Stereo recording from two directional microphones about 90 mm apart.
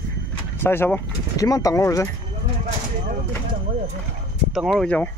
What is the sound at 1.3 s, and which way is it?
Speech, 40° left (ahead or behind).